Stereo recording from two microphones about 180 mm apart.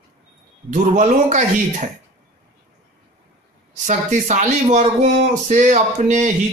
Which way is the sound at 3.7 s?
40° right (ahead or behind).